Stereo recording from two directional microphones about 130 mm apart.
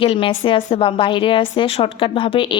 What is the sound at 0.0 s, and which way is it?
A woman's voice, 45° left (ahead or behind).